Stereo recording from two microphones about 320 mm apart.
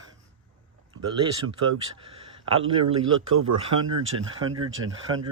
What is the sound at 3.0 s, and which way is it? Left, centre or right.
Speech, right.